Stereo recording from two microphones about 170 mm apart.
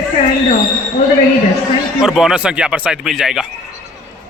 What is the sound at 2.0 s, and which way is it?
Speech, 5° right (ahead or behind).